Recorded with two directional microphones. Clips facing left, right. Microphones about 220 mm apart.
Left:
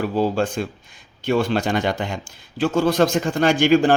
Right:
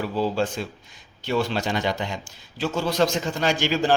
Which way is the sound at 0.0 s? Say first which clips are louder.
Left 4 dB; 50° left (ahead or behind).